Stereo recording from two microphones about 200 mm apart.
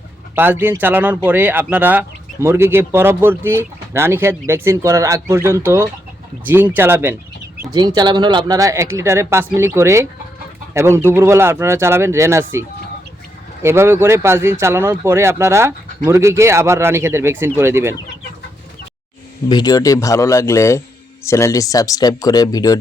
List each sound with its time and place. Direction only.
0.3 s speech: 10° right (ahead or behind)
19.5 s speech: 20° left (ahead or behind)